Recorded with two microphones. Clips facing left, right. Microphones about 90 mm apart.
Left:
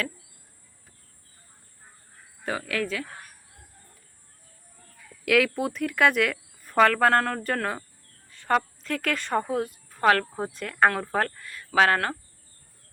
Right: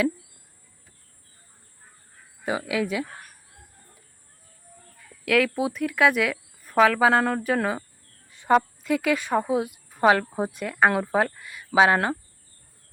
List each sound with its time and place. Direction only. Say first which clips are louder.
2.4 s a woman's voice: right 3 dB; 15° right (ahead or behind)
5.2 s speech: right 1 dB; centre (ahead or behind)
8.3 s a sound: right 5 dB; 15° right (ahead or behind)
8.5 s a woman's voice: right 5 dB; 10° right (ahead or behind)